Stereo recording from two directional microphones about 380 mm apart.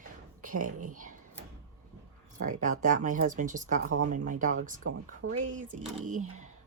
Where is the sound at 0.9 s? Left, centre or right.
Right.